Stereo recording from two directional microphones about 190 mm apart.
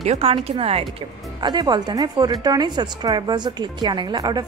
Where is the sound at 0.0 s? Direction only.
30° right (ahead or behind).